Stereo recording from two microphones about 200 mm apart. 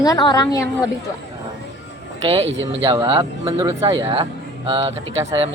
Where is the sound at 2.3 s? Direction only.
30° right (ahead or behind).